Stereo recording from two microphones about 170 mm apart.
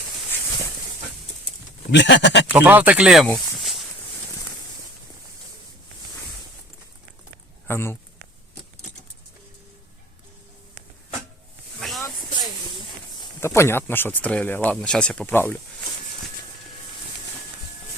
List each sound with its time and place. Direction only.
1.9 s speech: 90° left
2.5 s speech: 10° right (ahead or behind)
7.7 s speech: 15° left (ahead or behind)
11.8 s a sound: centre (ahead or behind)
13.4 s speech: 15° left (ahead or behind)